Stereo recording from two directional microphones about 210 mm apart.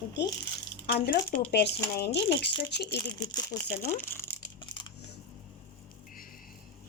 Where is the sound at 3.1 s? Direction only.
20° left (ahead or behind).